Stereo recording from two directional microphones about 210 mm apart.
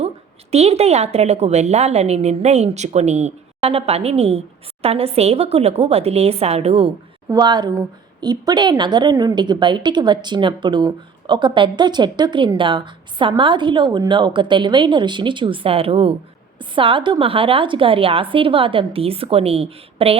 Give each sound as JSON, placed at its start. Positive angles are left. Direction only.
{"t": 0.5, "sound": "a woman's voice", "side_deg": -30}